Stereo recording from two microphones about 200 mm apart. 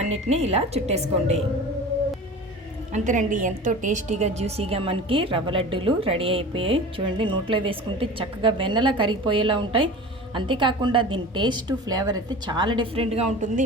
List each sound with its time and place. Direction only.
0.3 s speech: 30° right (ahead or behind)
2.9 s a woman's voice: 40° right (ahead or behind)